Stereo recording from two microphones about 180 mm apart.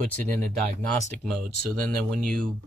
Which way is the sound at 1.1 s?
5° left (ahead or behind).